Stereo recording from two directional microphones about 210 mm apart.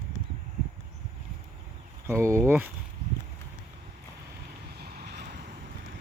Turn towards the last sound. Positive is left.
turn(degrees=-50)  # may be behind; listen again after turning